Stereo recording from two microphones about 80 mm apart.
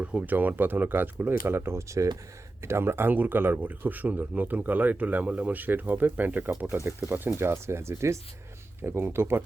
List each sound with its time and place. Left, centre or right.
0.0 s a man's voice: centre
7.3 s a man's voice: right